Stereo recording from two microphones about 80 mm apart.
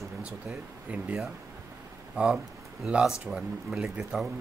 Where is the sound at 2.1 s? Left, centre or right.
Centre.